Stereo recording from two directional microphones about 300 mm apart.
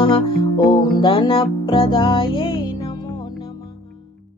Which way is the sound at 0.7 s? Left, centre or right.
Centre.